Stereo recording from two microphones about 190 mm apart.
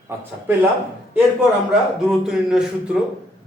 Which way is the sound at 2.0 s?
Centre (ahead or behind).